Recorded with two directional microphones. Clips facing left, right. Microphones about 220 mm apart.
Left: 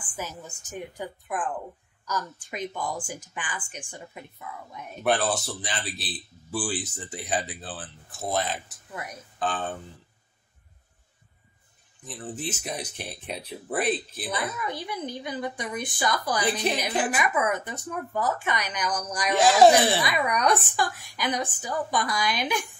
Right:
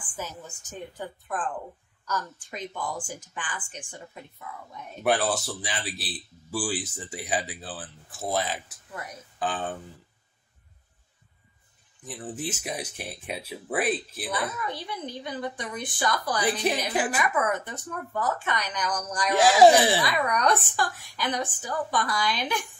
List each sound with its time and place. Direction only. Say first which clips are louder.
0.1 s a woman's voice: left 1 dB; 10° left (ahead or behind)
2.5 s a woman's voice: left 2 dB; 15° left (ahead or behind)
5.0 s speech: even; 10° right (ahead or behind)
12.1 s speech: even; 10° right (ahead or behind)
14.3 s a woman's voice: even; 15° left (ahead or behind)
19.3 s speech: even; 10° right (ahead or behind)
20.0 s a woman's voice: even; 10° left (ahead or behind)